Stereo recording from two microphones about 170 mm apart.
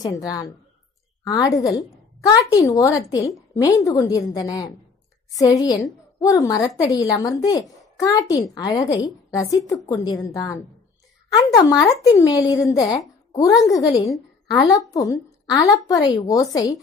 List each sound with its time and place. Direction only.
0.0 s a woman's voice: 20° left (ahead or behind)